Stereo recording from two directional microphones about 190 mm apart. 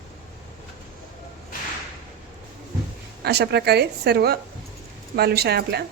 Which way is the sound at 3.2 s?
60° right (ahead or behind).